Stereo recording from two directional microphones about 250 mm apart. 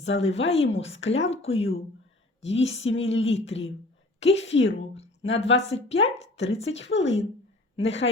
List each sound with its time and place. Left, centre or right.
0.0 s speech: left
1.5 s speech: left
2.4 s a woman's voice: left